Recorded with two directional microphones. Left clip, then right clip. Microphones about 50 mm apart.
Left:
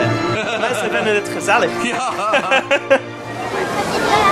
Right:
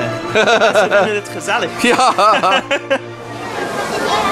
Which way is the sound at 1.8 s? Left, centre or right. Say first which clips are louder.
Right 8 dB; right.